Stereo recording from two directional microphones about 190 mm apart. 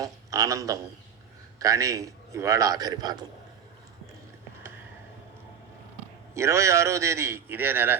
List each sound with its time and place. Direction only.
0.0 s a man's voice: 15° right (ahead or behind)
6.3 s a man's voice: 15° right (ahead or behind)